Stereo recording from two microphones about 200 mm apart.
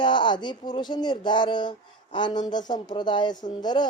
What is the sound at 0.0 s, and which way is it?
Speech, 25° left (ahead or behind).